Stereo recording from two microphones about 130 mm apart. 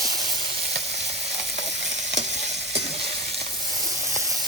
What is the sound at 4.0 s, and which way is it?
Steam, 25° right (ahead or behind).